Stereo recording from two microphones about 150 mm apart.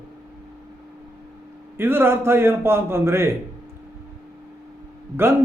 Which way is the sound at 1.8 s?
15° right (ahead or behind).